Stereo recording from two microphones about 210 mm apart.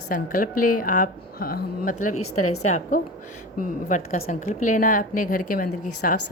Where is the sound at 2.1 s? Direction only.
90° left.